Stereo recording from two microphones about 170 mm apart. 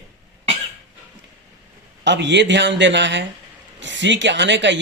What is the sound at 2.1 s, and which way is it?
Speech, 90° right.